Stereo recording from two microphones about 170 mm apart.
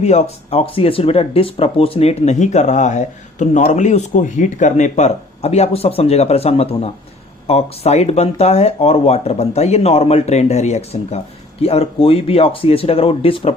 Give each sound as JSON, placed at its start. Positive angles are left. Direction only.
{"t": 0.0, "sound": "speech", "side_deg": 40}